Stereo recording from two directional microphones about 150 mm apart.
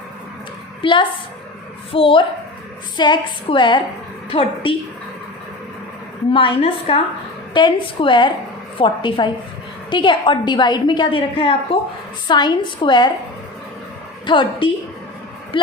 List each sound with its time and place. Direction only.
0.8 s a woman's voice: 35° left (ahead or behind)
6.3 s a woman's voice: 35° left (ahead or behind)
14.3 s a woman's voice: 30° left (ahead or behind)